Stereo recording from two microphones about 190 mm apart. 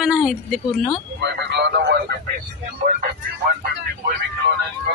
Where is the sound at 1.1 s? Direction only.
65° right (ahead or behind).